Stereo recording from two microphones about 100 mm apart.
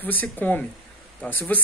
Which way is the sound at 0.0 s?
15° left (ahead or behind).